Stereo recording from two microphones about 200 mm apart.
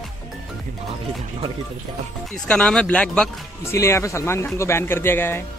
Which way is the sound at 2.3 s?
5° left (ahead or behind).